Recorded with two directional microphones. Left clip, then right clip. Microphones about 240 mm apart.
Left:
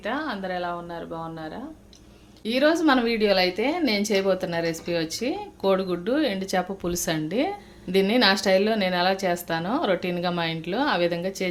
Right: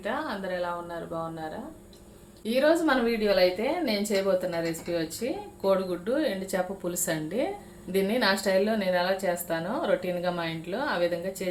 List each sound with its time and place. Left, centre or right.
0.0 s a woman's voice: left